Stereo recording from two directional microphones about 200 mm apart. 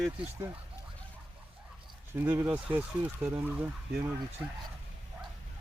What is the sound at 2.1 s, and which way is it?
Speech, 10° right (ahead or behind).